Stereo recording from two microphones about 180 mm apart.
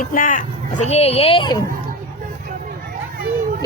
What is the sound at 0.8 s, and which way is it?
Speech, 35° left (ahead or behind).